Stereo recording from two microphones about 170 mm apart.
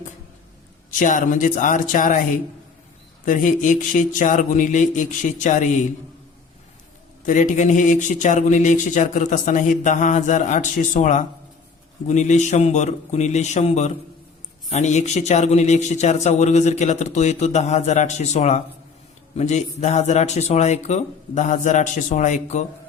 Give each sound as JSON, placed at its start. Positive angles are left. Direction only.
{"t": 0.9, "sound": "speech", "side_deg": 50}
{"t": 3.2, "sound": "speech", "side_deg": 50}
{"t": 7.3, "sound": "speech", "side_deg": 50}